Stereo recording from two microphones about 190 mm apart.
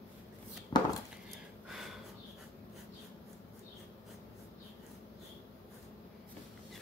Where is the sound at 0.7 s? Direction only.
20° left (ahead or behind).